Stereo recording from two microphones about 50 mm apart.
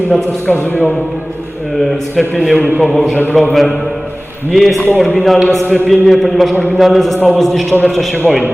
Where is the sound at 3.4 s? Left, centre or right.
Centre.